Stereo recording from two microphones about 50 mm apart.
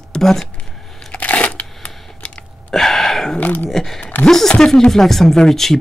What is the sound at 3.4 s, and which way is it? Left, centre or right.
Speech, left.